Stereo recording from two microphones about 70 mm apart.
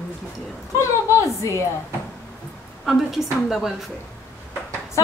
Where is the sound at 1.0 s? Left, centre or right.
Left.